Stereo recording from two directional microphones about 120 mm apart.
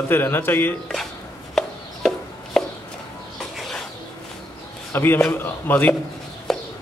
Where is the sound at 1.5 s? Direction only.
5° left (ahead or behind).